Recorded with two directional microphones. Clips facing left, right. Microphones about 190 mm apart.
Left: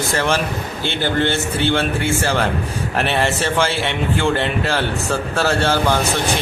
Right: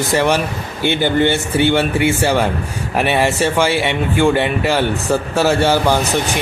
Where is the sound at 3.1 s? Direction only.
10° right (ahead or behind).